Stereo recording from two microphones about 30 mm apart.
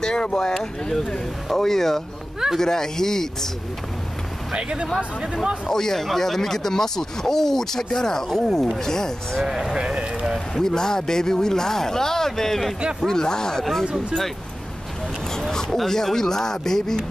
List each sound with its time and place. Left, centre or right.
0.0 s speech: left
0.6 s speech: centre
4.6 s speech: right
5.2 s speech: right
5.7 s speech: centre
9.4 s speech: centre
10.5 s speech: centre
13.0 s speech: left
15.7 s speech: centre